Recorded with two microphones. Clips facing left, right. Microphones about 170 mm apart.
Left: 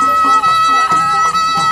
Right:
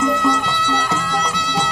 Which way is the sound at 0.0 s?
20° right (ahead or behind).